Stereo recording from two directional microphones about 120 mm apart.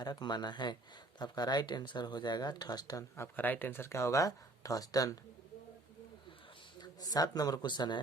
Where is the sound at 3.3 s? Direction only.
15° left (ahead or behind).